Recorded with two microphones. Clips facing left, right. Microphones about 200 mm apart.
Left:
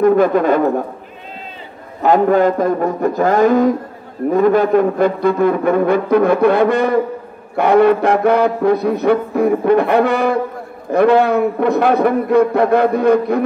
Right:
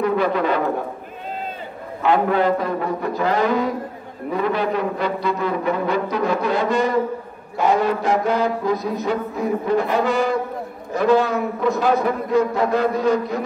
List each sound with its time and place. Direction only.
0.0 s speech: 50° left (ahead or behind)
2.0 s speech: 45° left (ahead or behind); by 7.0 s 60° left (ahead or behind)
7.5 s a sound: 60° left (ahead or behind)